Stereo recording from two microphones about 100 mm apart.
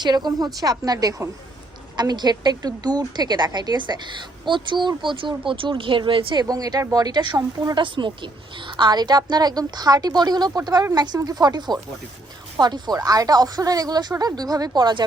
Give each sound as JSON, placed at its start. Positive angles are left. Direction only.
{"t": 0.0, "sound": "a woman's voice", "side_deg": -45}
{"t": 6.4, "sound": "speech", "side_deg": -40}
{"t": 7.8, "sound": "a woman's voice", "side_deg": -55}